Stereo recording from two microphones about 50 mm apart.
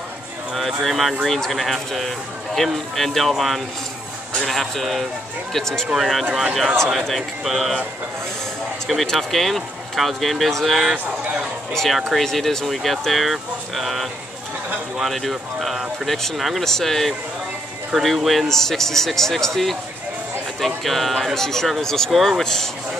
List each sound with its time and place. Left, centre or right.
0.6 s speech: centre
5.9 s speech: centre
8.8 s speech: centre
22.1 s speech: centre
22.4 s speech: centre